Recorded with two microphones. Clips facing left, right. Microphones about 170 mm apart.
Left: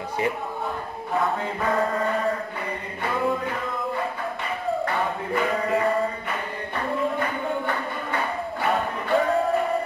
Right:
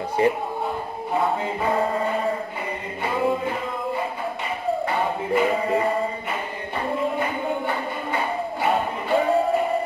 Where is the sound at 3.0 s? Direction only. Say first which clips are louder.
Right 2 dB; 15° right (ahead or behind).